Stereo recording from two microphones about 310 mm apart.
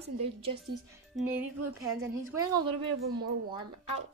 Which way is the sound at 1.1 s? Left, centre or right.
Centre.